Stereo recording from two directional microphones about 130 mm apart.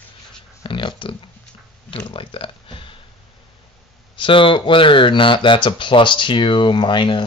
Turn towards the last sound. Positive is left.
turn(degrees=40)  # may be behind; listen again after turning